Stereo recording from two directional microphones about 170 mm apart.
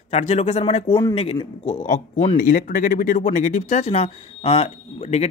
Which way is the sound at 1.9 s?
50° left (ahead or behind).